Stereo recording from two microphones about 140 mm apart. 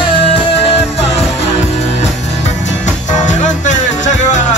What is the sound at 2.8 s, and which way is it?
Music, 60° left (ahead or behind).